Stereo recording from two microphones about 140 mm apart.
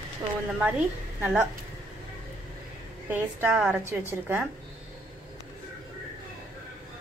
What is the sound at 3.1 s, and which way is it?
A woman's voice, 15° right (ahead or behind).